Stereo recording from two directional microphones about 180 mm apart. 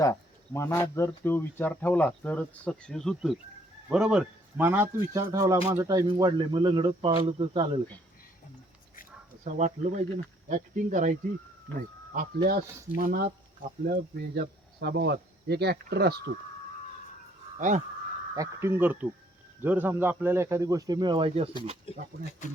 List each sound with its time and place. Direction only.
0.0 s speech: 15° left (ahead or behind); by 7.8 s 30° right (ahead or behind)
9.4 s speech: 40° right (ahead or behind)
11.7 s speech: 10° left (ahead or behind)
12.1 s speech: 55° right (ahead or behind)
17.6 s speech: 45° right (ahead or behind)
18.3 s a man's voice: 15° right (ahead or behind); by 21.5 s 30° right (ahead or behind)